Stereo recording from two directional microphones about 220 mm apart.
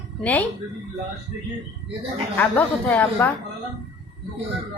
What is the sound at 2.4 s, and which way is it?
Speech, 5° left (ahead or behind).